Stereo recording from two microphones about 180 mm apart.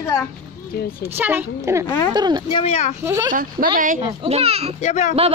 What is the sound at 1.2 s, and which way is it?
Speech, 10° right (ahead or behind).